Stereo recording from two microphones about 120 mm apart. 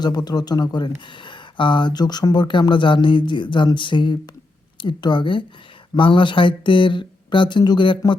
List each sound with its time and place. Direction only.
0.0 s speech: 35° left (ahead or behind)